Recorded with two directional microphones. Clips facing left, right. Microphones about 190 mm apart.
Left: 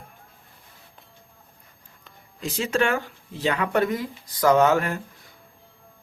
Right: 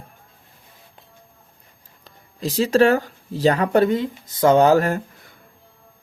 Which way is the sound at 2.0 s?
35° right (ahead or behind).